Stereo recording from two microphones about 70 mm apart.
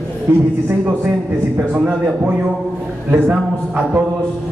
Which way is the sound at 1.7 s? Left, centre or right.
Right.